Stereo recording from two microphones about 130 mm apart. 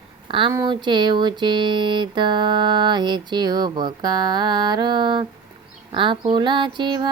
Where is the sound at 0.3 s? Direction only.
40° right (ahead or behind).